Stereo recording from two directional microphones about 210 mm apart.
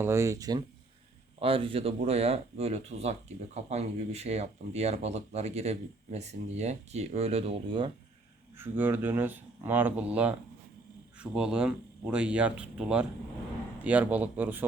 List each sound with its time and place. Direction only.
0.0 s speech: 15° right (ahead or behind)
8.5 s speech: 10° right (ahead or behind)